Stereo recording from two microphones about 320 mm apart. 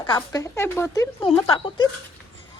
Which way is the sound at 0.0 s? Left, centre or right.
Centre.